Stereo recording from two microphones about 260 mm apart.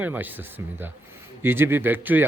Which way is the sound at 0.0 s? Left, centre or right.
Centre.